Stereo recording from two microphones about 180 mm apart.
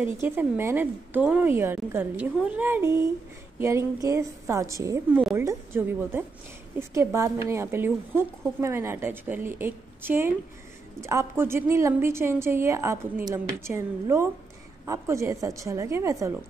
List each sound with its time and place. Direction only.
0.0 s a woman's voice: 10° right (ahead or behind)